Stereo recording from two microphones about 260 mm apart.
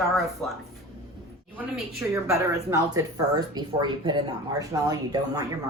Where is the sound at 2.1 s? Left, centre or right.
Centre.